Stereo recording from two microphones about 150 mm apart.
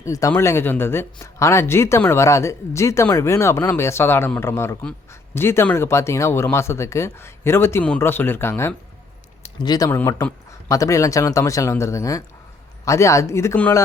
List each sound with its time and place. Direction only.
0.0 s speech: 20° left (ahead or behind)